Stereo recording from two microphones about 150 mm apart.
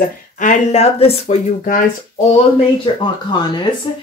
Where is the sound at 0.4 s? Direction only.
55° left (ahead or behind).